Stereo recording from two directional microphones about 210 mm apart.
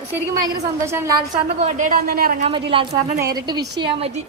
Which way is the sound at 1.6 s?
40° right (ahead or behind).